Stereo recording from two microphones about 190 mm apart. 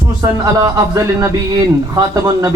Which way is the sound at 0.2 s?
20° right (ahead or behind).